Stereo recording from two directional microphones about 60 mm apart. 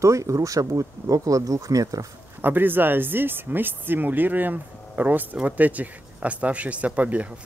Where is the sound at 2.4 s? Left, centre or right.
Right.